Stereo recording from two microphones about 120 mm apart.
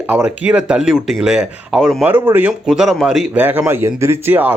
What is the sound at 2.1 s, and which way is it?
Speech, 15° right (ahead or behind).